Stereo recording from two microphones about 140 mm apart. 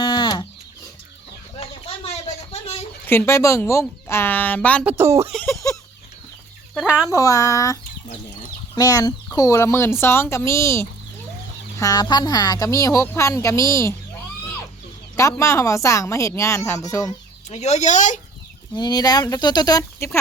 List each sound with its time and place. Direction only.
0.0 s livestock: 30° left (ahead or behind)
3.1 s a woman's voice: 20° left (ahead or behind)
4.9 s speech: 20° right (ahead or behind)
5.5 s a sound: 25° left (ahead or behind)
6.7 s speech: 5° right (ahead or behind)
7.1 s speech: 25° left (ahead or behind)
15.1 s speech: 20° left (ahead or behind)
17.5 s speech: 55° left (ahead or behind)
18.7 s speech: 30° left (ahead or behind)